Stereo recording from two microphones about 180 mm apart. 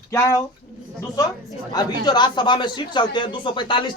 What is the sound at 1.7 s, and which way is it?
Speech, 20° left (ahead or behind).